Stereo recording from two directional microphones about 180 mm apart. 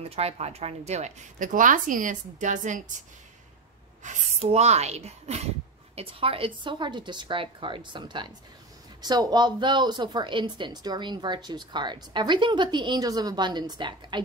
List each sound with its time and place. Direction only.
0.0 s a woman's voice: 35° right (ahead or behind)
4.0 s speech: 40° right (ahead or behind)